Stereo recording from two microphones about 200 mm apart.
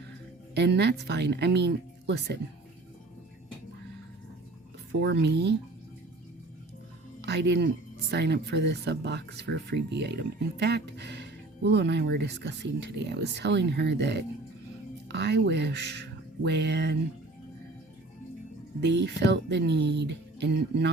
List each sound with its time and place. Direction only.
0.5 s speech: 60° right (ahead or behind)
4.9 s speech: 60° right (ahead or behind)
7.2 s speech: 60° right (ahead or behind)
18.8 s speech: 60° right (ahead or behind)